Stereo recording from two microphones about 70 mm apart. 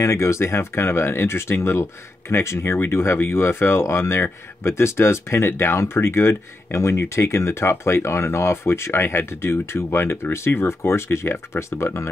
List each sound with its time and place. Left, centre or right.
0.0 s speech: left